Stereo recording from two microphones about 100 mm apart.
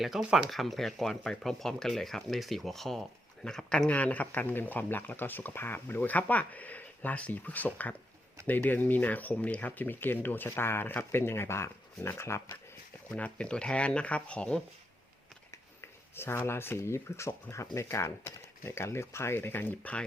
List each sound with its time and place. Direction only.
0.0 s speech: 5° right (ahead or behind); by 12.5 s 25° left (ahead or behind)
13.1 s speech: 15° left (ahead or behind)
15.8 s a sound: 25° left (ahead or behind)
16.5 s speech: 25° left (ahead or behind)